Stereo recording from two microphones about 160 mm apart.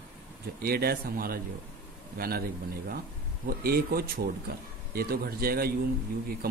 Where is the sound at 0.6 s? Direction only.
70° right (ahead or behind).